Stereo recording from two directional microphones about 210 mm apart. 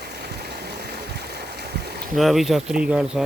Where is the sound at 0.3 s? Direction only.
50° right (ahead or behind).